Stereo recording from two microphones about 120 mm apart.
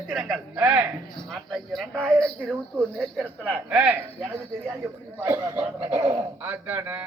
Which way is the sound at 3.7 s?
10° right (ahead or behind).